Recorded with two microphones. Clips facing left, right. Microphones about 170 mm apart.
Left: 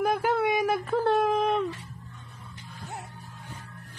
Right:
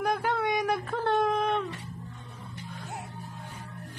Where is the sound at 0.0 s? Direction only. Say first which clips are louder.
Left 3 dB; 5° left (ahead or behind).